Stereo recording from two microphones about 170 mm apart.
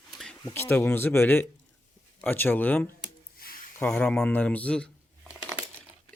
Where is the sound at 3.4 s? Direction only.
60° left (ahead or behind).